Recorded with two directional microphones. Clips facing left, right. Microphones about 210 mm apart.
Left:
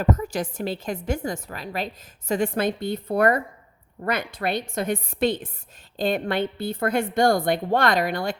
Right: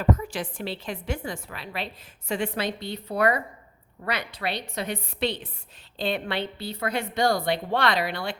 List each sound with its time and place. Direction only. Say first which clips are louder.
0.0 s a woman's voice: left 2 dB; 40° left (ahead or behind)